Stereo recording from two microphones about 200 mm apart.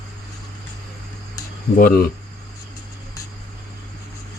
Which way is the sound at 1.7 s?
45° left (ahead or behind).